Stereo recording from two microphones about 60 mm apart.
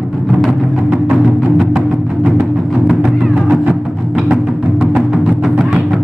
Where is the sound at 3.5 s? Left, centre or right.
Centre.